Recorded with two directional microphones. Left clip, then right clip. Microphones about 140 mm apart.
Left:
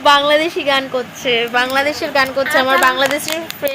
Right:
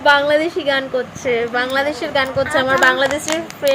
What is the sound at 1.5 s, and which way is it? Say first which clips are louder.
Speech: left 3 dB; 5° right (ahead or behind).